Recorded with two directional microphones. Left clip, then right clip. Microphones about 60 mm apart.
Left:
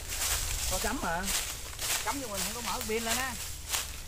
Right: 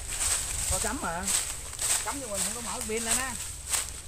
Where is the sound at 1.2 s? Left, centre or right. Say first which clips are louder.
Right 2 dB; centre.